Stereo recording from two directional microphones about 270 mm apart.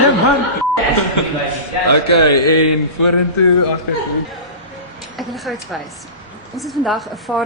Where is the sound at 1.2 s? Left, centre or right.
Left.